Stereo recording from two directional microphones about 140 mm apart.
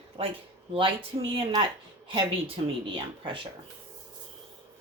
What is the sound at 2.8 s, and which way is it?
Speech, 35° right (ahead or behind).